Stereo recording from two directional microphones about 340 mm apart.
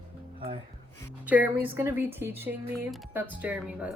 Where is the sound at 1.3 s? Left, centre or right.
Centre.